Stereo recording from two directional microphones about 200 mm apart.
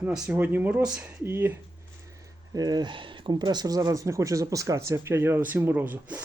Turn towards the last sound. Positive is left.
turn(degrees=-10)  # may be behind; listen again after turning